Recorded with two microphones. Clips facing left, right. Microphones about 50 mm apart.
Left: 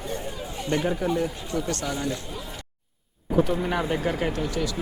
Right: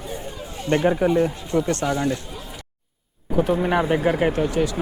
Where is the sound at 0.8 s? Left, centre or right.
Right.